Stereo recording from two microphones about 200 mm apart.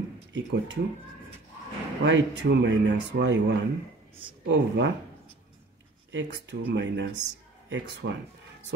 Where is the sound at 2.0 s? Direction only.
65° right (ahead or behind).